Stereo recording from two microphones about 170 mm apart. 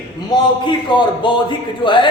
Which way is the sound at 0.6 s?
30° left (ahead or behind).